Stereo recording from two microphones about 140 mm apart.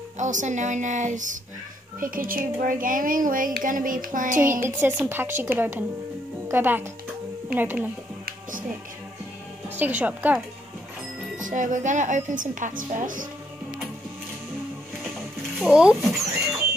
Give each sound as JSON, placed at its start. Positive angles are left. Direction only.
{"t": 0.2, "sound": "a woman's voice", "side_deg": -60}
{"t": 2.0, "sound": "a woman's voice", "side_deg": -85}
{"t": 4.6, "sound": "a woman's voice", "side_deg": -15}
{"t": 8.3, "sound": "music", "side_deg": -75}
{"t": 9.8, "sound": "a woman's voice", "side_deg": -10}
{"t": 11.3, "sound": "a woman's voice", "side_deg": -65}
{"t": 15.6, "sound": "speech", "side_deg": -5}